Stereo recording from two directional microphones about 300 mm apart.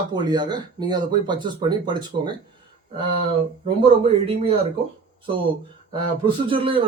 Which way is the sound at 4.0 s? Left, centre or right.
Centre.